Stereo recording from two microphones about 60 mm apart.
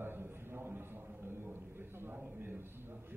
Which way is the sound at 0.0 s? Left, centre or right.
Right.